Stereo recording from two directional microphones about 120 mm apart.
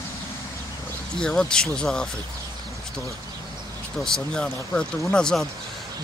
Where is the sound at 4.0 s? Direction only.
5° left (ahead or behind).